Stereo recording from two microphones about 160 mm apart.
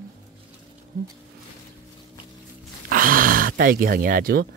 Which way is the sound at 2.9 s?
60° right (ahead or behind).